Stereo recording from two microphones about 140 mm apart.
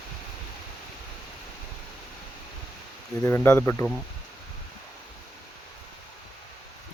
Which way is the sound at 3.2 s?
15° left (ahead or behind).